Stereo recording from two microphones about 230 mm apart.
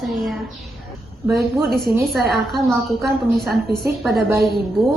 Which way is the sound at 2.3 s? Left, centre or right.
Centre.